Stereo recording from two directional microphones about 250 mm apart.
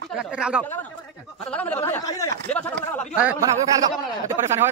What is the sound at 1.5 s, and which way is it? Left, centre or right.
Speech, centre.